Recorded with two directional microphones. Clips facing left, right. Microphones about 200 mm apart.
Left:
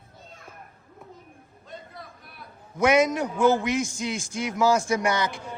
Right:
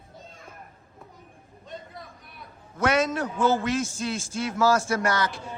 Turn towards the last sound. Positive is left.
turn(degrees=15)  # may be behind; listen again after turning